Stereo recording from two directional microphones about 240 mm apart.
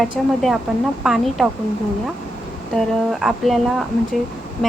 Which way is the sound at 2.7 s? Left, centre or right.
Centre.